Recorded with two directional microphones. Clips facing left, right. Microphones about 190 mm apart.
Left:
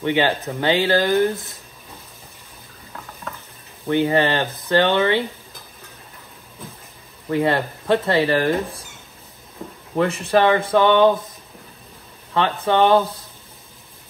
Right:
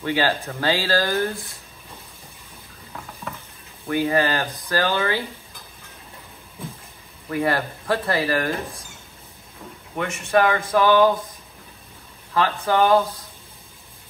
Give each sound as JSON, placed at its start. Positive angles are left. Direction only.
{"t": 0.0, "sound": "speech", "side_deg": 20}
{"t": 3.8, "sound": "speech", "side_deg": 25}
{"t": 7.2, "sound": "speech", "side_deg": 25}
{"t": 9.9, "sound": "speech", "side_deg": 35}
{"t": 12.4, "sound": "speech", "side_deg": 25}